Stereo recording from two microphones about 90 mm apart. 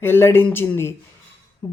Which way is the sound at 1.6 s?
40° left (ahead or behind).